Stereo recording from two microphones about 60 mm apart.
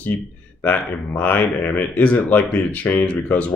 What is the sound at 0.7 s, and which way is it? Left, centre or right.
Speech, left.